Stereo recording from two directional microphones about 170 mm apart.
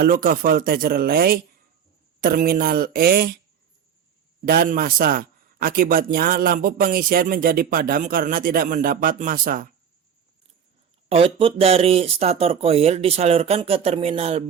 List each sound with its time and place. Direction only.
0.0 s speech: 55° right (ahead or behind)
4.4 s speech: 60° right (ahead or behind)
11.1 s speech: 30° right (ahead or behind)